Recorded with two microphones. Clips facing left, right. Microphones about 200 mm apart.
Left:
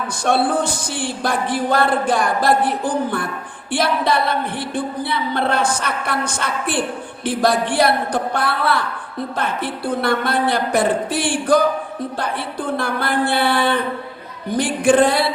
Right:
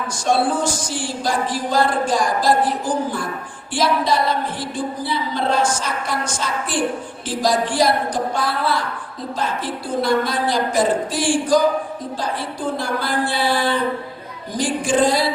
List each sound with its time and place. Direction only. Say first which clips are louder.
0.3 s music: left 1 dB; 60° left (ahead or behind)